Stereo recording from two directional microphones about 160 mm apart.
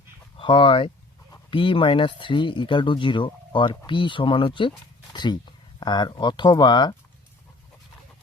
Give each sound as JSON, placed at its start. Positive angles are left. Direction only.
{"t": 0.3, "sound": "speech", "side_deg": 35}